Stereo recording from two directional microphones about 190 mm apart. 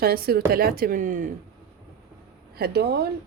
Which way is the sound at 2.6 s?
60° right (ahead or behind).